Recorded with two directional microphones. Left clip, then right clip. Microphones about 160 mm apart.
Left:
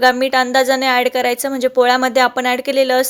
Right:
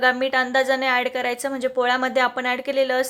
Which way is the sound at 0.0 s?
25° left (ahead or behind).